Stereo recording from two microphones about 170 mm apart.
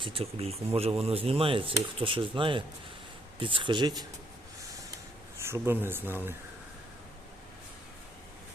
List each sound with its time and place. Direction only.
0.0 s speech: 35° right (ahead or behind)
5.4 s speech: 15° right (ahead or behind)